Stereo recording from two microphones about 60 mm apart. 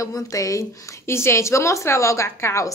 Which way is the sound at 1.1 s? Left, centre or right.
Left.